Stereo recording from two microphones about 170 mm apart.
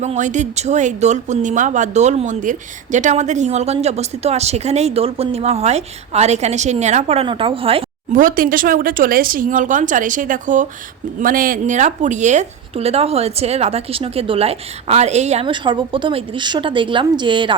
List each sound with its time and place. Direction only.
0.0 s speech: 45° right (ahead or behind)
8.1 s speech: 55° right (ahead or behind); by 17.5 s 30° right (ahead or behind)